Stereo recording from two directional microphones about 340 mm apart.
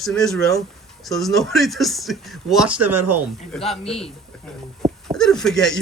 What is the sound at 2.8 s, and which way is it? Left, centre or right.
Speech, right.